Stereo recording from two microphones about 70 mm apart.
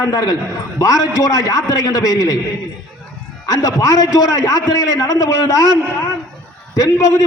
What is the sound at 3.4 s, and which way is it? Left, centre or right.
A man's voice, left.